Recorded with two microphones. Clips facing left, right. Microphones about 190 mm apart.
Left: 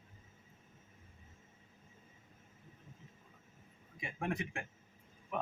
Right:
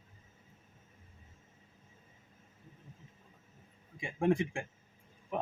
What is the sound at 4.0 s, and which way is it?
Speech, 30° right (ahead or behind).